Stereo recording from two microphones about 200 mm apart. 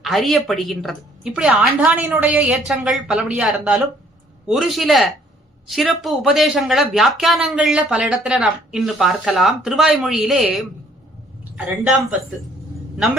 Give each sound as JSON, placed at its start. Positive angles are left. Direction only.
{"t": 0.0, "sound": "a woman's voice", "side_deg": 0}